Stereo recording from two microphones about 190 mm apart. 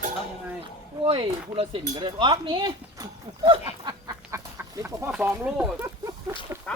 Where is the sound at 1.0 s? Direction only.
25° right (ahead or behind); by 5.9 s 10° right (ahead or behind).